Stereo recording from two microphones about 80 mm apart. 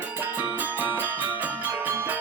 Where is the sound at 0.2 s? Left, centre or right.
Right.